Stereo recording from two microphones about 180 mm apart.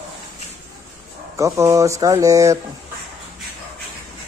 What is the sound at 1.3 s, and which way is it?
Speech, 15° right (ahead or behind).